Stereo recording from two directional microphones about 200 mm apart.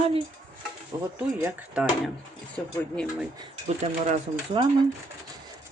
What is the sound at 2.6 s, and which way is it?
Speech, 10° left (ahead or behind).